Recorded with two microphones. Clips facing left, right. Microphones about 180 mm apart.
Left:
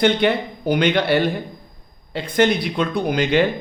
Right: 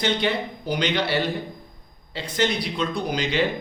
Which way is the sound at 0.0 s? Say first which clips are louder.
Left 6 dB; 55° left (ahead or behind).